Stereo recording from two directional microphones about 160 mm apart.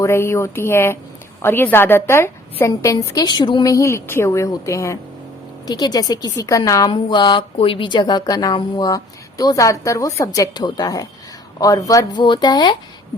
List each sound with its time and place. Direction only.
0.0 s a woman's voice: 15° left (ahead or behind)